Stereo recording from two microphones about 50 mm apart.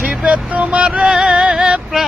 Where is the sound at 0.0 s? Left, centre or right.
Right.